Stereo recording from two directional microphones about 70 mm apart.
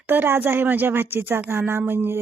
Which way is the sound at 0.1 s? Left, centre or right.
Right.